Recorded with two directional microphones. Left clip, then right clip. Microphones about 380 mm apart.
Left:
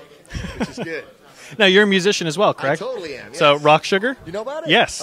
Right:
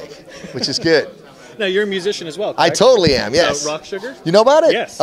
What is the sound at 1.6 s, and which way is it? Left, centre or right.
A man's voice, left.